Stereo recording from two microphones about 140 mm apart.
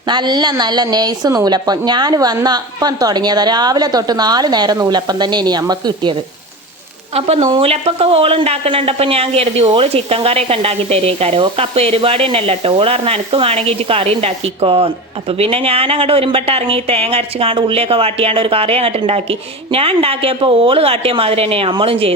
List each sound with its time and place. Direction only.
0.1 s a woman's voice: 30° right (ahead or behind)
7.1 s speech: 45° right (ahead or behind)